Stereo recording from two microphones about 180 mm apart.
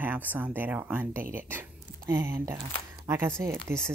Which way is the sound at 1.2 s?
50° right (ahead or behind).